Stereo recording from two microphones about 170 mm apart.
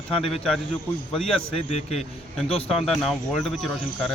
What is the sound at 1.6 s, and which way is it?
Speech, 40° left (ahead or behind).